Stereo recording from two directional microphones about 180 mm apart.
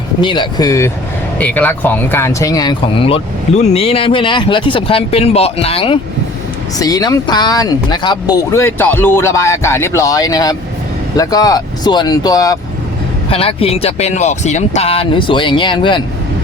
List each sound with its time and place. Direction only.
0.2 s speech: 25° left (ahead or behind)
1.4 s speech: 10° left (ahead or behind); by 6.0 s 30° left (ahead or behind)
6.7 s speech: 20° left (ahead or behind)
13.3 s speech: 30° left (ahead or behind)